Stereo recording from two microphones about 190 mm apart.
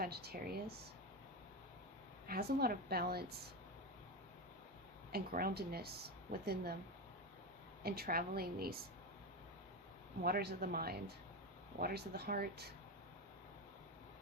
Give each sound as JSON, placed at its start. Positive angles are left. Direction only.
{"t": 0.0, "sound": "a woman's voice", "side_deg": -55}
{"t": 2.2, "sound": "a woman's voice", "side_deg": -55}
{"t": 5.1, "sound": "a woman's voice", "side_deg": -50}
{"t": 7.9, "sound": "a woman's voice", "side_deg": -50}
{"t": 10.2, "sound": "a woman's voice", "side_deg": -55}